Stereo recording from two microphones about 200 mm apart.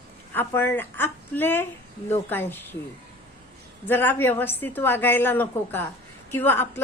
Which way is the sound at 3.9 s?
10° left (ahead or behind).